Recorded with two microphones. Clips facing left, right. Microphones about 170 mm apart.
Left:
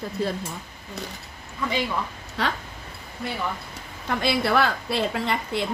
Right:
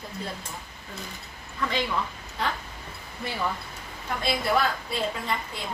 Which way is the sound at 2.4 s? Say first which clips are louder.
Left 3 dB; 80° left.